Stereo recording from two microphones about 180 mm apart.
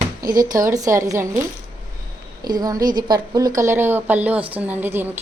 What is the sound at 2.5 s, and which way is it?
A woman's voice, 20° right (ahead or behind).